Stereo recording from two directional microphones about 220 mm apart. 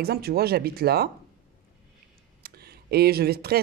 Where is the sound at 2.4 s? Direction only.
45° right (ahead or behind).